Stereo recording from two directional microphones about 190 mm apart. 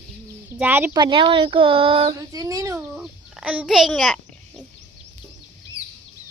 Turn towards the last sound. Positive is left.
turn(degrees=0)  # may be behind; listen again after turning